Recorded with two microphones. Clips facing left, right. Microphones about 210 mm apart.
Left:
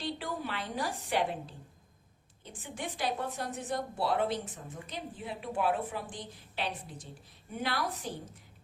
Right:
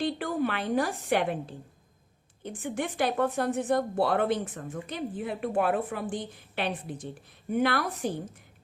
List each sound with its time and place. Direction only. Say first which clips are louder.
0.0 s a woman's voice: right 9 dB; 55° right (ahead or behind)